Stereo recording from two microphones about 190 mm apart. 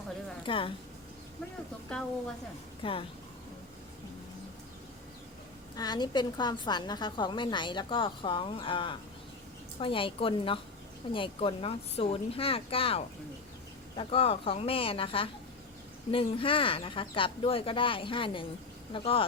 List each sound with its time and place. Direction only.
0.4 s a woman's voice: 25° left (ahead or behind)
2.8 s a woman's voice: 25° left (ahead or behind)
5.7 s a woman's voice: 20° left (ahead or behind)